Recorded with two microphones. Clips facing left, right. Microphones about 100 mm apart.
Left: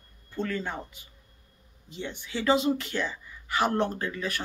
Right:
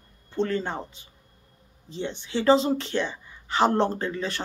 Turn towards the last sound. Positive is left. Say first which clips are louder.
# right 3 dB
turn(degrees=-30)  # may be behind; listen again after turning